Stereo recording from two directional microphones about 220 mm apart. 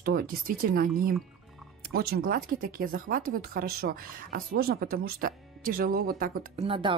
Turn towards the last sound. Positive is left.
turn(degrees=-25)  # may be behind; listen again after turning